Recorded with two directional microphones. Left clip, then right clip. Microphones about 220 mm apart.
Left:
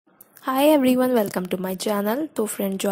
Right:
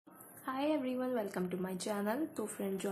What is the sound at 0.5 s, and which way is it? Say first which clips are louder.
A woman's voice: left 18 dB; 50° left (ahead or behind).